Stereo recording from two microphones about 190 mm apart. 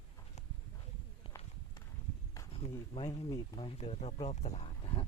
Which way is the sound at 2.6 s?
30° left (ahead or behind).